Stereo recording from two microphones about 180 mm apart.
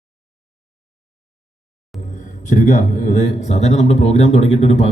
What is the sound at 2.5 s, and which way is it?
Speech, 45° left (ahead or behind).